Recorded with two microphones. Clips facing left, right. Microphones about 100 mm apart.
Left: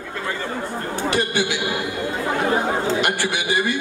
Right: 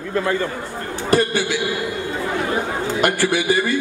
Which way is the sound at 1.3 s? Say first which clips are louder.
Right 1 dB; 20° left (ahead or behind).